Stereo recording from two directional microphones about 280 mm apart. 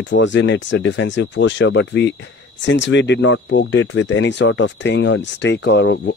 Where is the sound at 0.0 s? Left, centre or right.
Left.